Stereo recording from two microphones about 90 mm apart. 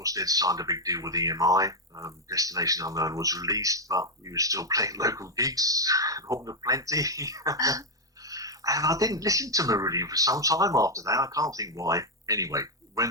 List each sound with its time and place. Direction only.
0.0 s speech: 40° right (ahead or behind)